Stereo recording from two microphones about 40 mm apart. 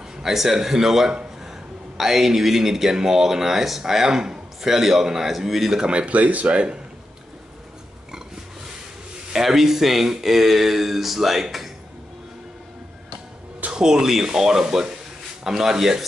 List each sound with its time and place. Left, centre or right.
0.2 s a man's voice: centre
5.8 s speech: right
9.3 s speech: centre
13.7 s a man's voice: right
14.0 s speech: centre